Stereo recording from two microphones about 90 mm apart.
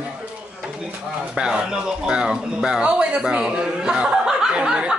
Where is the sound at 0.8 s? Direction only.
10° right (ahead or behind).